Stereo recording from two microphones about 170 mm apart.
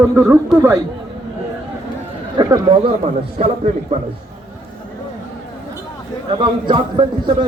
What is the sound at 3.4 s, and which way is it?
Speech, 35° right (ahead or behind).